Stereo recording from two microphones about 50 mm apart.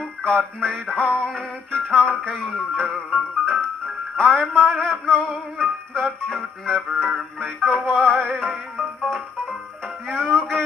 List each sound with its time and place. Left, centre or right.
0.2 s music: centre
10.0 s music: centre